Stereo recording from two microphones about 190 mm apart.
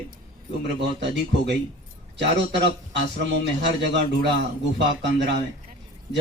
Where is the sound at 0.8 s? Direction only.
65° right (ahead or behind).